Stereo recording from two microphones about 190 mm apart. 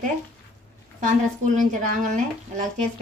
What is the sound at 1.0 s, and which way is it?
A woman's voice, 40° right (ahead or behind).